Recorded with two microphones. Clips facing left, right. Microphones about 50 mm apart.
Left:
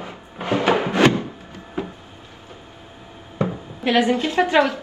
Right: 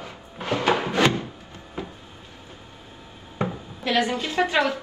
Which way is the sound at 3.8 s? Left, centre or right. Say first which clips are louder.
Left 5 dB; left.